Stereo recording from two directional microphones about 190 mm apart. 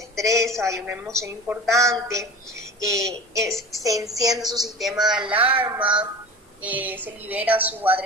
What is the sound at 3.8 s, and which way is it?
Speech, 20° right (ahead or behind).